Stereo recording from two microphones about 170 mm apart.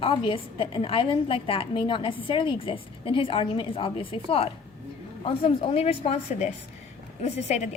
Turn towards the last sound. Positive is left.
turn(degrees=40)  # may be behind; listen again after turning